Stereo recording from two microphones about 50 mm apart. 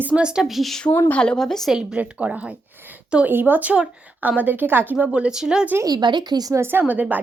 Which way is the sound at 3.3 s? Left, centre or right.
Right.